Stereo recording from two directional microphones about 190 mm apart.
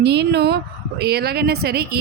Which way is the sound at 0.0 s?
65° right (ahead or behind).